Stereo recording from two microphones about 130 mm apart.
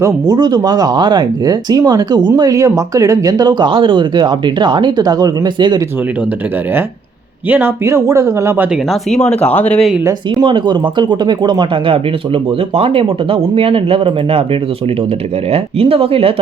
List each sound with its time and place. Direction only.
0.0 s speech: 30° right (ahead or behind)
7.5 s speech: 20° right (ahead or behind)
8.9 s speech: 5° left (ahead or behind)
10.4 s speech: 35° right (ahead or behind)
15.5 s speech: 45° right (ahead or behind)